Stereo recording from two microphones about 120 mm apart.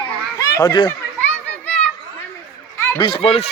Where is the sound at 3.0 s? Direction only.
50° left (ahead or behind).